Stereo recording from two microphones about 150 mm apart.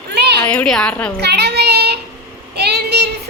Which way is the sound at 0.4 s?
5° left (ahead or behind).